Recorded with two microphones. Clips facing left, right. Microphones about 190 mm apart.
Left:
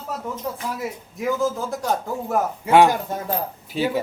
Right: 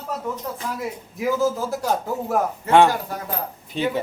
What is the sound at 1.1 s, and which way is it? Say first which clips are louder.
Speech: right 2 dB; centre (ahead or behind).